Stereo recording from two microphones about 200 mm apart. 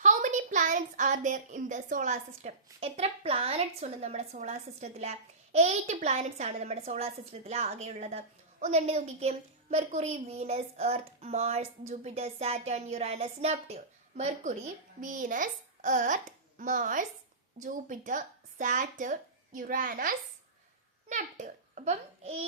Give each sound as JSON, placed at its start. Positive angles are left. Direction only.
{"t": 0.0, "sound": "a woman's voice", "side_deg": -40}